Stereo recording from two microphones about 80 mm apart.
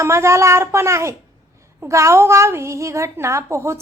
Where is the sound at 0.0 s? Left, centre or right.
Right.